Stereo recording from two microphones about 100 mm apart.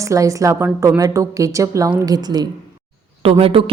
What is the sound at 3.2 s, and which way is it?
Speech, 70° right (ahead or behind).